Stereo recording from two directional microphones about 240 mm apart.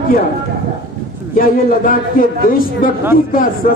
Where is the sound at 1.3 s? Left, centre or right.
Left.